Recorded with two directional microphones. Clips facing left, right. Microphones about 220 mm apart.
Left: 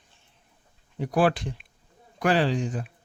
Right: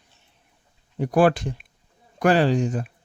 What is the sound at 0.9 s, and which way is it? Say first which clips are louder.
Speech: right 4 dB; 50° right (ahead or behind).